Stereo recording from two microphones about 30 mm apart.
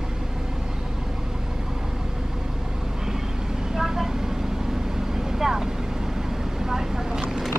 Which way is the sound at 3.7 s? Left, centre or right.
Centre.